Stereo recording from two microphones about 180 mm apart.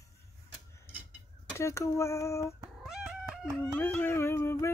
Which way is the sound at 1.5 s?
15° left (ahead or behind).